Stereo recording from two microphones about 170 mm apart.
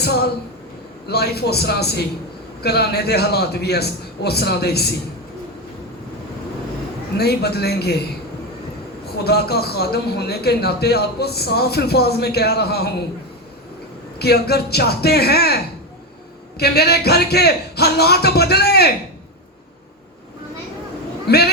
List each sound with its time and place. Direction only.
0.0 s speech: 70° left (ahead or behind)
7.2 s speech: 70° left (ahead or behind)
9.2 s speech: 70° left (ahead or behind)
14.2 s speech: 70° left (ahead or behind)
16.6 s speech: 70° left (ahead or behind)
21.2 s a man's voice: 70° left (ahead or behind)